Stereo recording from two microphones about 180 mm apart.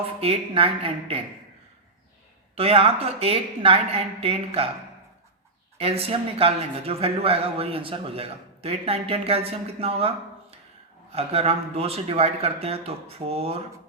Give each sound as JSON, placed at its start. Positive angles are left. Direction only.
{"t": 0.2, "sound": "speech", "side_deg": -30}
{"t": 2.6, "sound": "speech", "side_deg": -30}
{"t": 5.7, "sound": "speech", "side_deg": -35}
{"t": 11.1, "sound": "speech", "side_deg": -35}